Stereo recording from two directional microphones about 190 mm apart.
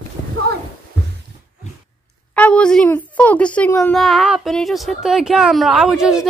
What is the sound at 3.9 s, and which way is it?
Speech, centre (ahead or behind).